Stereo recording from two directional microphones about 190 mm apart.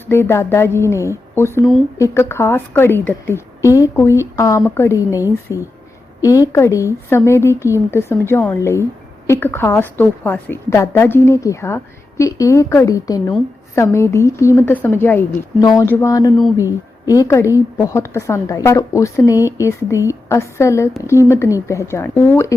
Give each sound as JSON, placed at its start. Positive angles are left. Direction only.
{"t": 0.1, "sound": "speech", "side_deg": 15}
{"t": 6.2, "sound": "speech", "side_deg": 15}